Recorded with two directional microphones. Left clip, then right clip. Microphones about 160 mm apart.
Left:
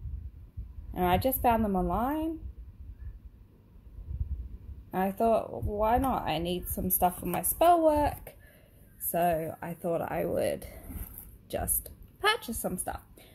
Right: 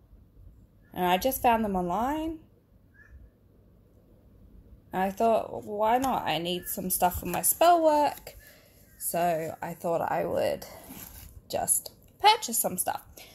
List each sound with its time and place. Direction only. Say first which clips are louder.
0.9 s speech: right 1 dB; 5° right (ahead or behind)
4.9 s speech: right 2 dB; 5° right (ahead or behind)